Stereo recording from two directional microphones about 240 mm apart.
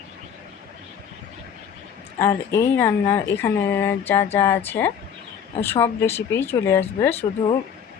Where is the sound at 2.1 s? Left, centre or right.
Centre.